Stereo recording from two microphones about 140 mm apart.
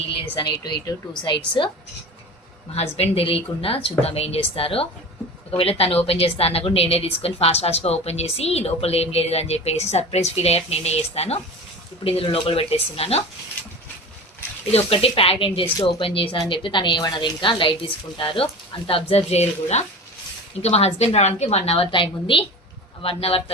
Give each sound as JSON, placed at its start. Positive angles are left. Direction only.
{"t": 0.3, "sound": "a woman's voice", "side_deg": 30}
{"t": 2.7, "sound": "a woman's voice", "side_deg": 50}
{"t": 14.7, "sound": "a woman's voice", "side_deg": 45}